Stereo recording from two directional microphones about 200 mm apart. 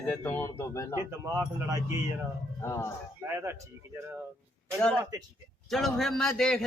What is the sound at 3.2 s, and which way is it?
Speech, 15° right (ahead or behind).